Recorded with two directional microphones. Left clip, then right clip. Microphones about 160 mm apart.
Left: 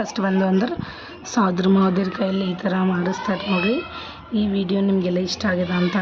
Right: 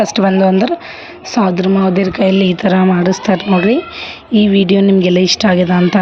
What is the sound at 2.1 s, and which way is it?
Speech, 30° right (ahead or behind).